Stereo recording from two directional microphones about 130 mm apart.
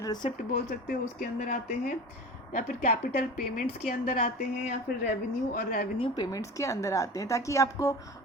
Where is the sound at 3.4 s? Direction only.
85° left.